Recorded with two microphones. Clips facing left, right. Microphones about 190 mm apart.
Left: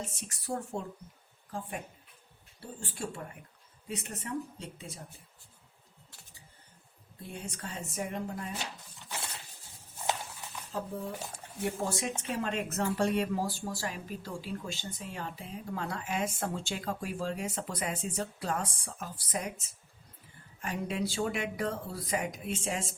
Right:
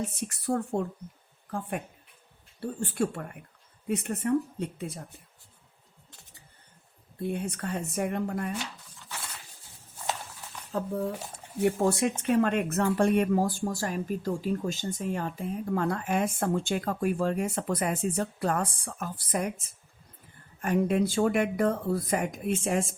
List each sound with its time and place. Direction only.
0.0 s speech: 60° right (ahead or behind)
7.2 s speech: 60° right (ahead or behind)
9.0 s a sound: 20° left (ahead or behind)
11.6 s speech: 60° right (ahead or behind)